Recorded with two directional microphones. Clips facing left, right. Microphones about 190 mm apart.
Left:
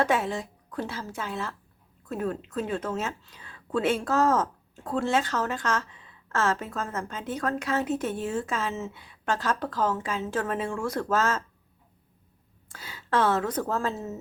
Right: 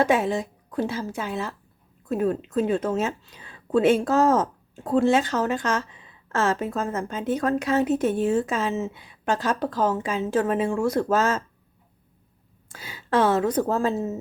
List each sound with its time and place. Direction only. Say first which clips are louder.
0.0 s a woman's voice: right 4 dB; 15° right (ahead or behind)
12.6 s a woman's voice: right 3 dB; 15° right (ahead or behind)